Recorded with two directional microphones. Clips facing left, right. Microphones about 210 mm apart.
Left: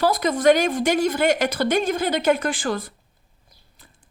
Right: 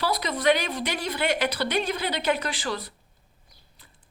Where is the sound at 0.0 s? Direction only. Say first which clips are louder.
Left 7 dB; 45° left (ahead or behind).